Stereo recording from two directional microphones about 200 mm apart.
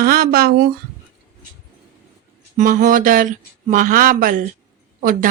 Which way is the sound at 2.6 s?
40° right (ahead or behind).